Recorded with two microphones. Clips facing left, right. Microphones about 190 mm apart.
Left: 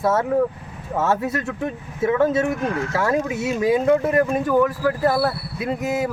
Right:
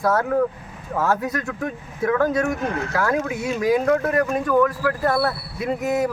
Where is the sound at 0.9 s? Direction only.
25° left (ahead or behind).